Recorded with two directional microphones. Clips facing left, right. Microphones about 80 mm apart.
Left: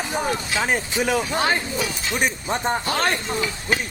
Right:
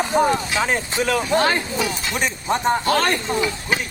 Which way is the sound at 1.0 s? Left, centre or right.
Centre.